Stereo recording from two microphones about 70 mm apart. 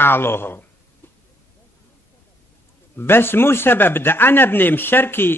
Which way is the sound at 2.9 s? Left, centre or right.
Left.